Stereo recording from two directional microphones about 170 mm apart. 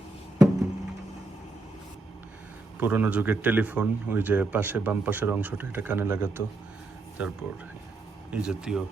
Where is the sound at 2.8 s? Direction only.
10° right (ahead or behind).